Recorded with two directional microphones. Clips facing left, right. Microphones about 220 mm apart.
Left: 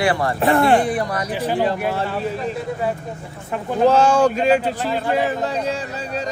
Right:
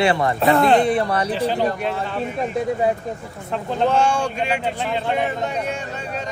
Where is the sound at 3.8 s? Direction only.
40° left (ahead or behind).